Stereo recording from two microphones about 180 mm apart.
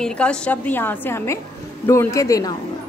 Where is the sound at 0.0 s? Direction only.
5° left (ahead or behind).